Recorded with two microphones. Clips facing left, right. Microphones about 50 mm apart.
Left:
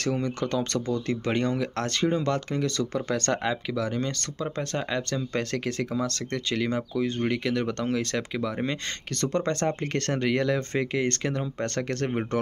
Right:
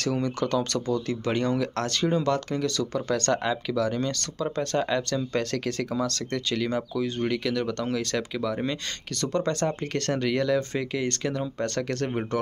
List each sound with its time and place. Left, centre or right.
0.0 s speech: left
3.4 s speech: left
9.2 s speech: left